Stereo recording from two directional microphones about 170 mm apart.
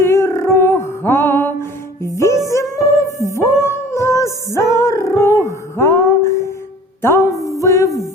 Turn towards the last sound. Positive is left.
turn(degrees=15)  # may be behind; listen again after turning